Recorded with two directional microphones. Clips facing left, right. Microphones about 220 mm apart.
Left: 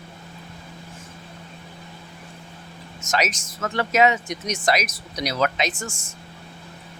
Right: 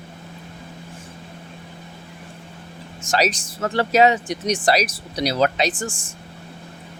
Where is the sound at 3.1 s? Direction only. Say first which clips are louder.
Right 4 dB; 35° right (ahead or behind).